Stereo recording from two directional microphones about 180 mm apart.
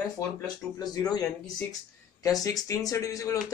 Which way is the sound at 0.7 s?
20° left (ahead or behind).